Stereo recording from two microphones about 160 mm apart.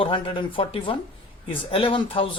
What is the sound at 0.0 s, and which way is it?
Speech, 30° left (ahead or behind).